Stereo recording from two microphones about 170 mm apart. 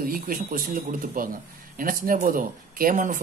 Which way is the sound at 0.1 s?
55° right (ahead or behind).